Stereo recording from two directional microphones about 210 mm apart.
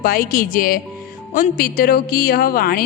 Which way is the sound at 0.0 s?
45° left (ahead or behind).